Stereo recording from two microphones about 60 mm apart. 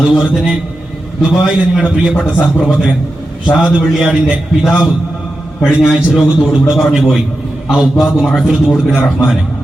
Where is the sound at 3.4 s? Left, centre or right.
Centre.